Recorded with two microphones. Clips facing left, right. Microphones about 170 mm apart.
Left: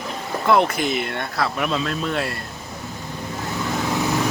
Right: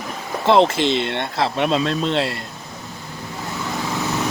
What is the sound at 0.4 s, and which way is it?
Speech, 25° right (ahead or behind).